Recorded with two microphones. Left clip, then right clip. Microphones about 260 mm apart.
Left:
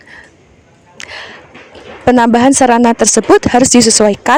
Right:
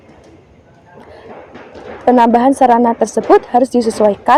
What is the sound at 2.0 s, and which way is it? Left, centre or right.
Speech, left.